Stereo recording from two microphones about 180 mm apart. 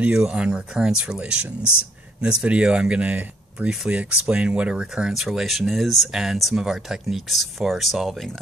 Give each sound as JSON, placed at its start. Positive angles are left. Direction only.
{"t": 0.0, "sound": "speech", "side_deg": -5}
{"t": 1.6, "sound": "speech", "side_deg": 10}
{"t": 2.2, "sound": "speech", "side_deg": -5}